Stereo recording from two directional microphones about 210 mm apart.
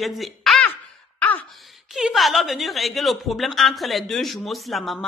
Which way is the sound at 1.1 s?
10° left (ahead or behind).